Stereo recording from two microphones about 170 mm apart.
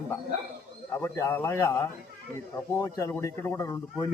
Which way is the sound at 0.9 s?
15° left (ahead or behind).